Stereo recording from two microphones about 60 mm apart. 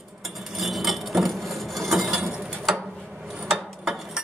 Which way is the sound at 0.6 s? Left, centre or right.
Centre.